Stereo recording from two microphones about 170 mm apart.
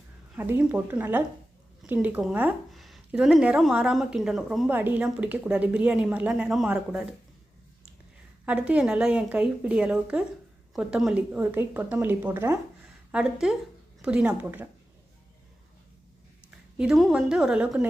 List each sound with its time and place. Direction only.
0.3 s speech: 10° right (ahead or behind)
8.4 s speech: 10° right (ahead or behind)
16.7 s a woman's voice: 5° right (ahead or behind)